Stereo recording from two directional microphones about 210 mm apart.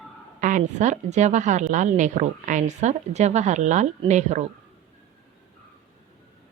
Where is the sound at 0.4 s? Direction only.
35° right (ahead or behind).